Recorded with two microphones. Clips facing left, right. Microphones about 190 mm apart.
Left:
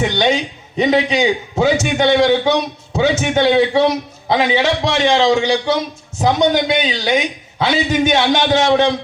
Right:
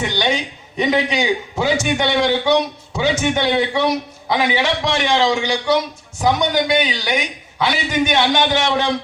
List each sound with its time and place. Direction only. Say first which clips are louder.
0.0 s a man's voice: left 4 dB; 20° left (ahead or behind)